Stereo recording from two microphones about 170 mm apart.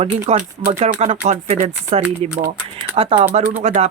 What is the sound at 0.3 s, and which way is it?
Speech, 40° right (ahead or behind).